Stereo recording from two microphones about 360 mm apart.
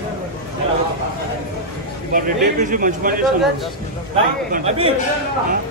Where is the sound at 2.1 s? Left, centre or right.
Right.